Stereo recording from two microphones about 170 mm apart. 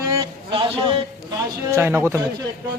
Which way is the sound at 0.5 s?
30° right (ahead or behind).